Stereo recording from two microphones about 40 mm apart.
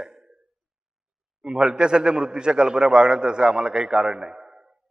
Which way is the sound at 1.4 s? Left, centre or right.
Right.